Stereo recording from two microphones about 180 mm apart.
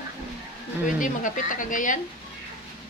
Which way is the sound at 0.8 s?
45° left (ahead or behind).